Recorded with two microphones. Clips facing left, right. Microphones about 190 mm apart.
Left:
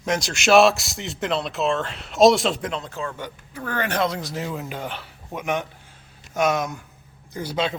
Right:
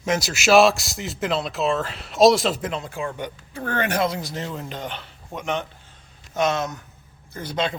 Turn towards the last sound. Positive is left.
turn(degrees=5)  # may be behind; listen again after turning